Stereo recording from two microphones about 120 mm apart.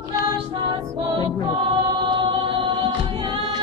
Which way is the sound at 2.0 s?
45° right (ahead or behind).